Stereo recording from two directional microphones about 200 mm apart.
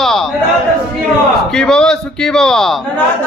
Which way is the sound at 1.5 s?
5° left (ahead or behind).